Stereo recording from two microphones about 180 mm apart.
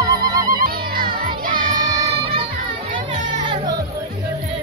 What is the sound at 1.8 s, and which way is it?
Music, 30° right (ahead or behind).